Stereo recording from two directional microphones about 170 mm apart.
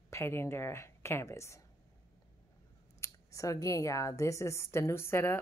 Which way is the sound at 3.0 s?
20° left (ahead or behind).